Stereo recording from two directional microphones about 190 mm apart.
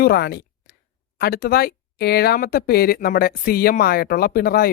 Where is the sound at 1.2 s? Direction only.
55° left (ahead or behind).